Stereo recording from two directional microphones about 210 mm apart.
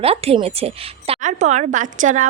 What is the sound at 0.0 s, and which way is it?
A woman's voice, 30° right (ahead or behind).